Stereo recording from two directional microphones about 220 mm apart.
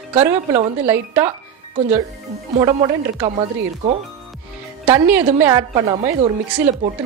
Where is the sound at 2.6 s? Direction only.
20° right (ahead or behind).